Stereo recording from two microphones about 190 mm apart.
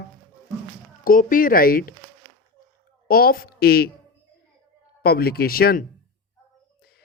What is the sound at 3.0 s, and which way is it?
Speech, 50° left (ahead or behind).